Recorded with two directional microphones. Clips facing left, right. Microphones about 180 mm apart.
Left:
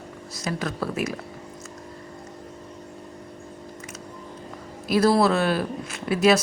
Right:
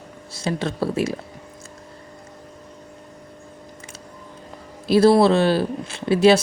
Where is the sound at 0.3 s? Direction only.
30° right (ahead or behind).